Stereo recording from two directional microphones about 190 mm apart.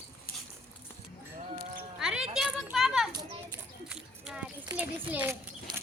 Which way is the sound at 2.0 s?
5° right (ahead or behind).